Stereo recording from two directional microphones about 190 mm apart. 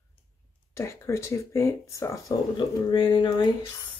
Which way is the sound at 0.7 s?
15° left (ahead or behind).